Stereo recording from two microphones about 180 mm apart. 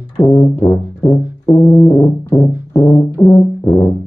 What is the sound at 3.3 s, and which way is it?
Brass instrument, 15° left (ahead or behind).